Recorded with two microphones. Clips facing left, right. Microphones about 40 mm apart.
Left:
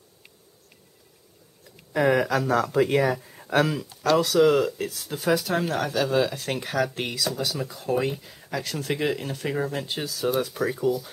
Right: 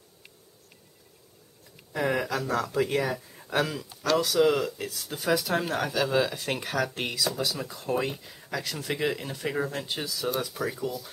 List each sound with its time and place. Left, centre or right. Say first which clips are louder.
2.0 s speech: left 6 dB; centre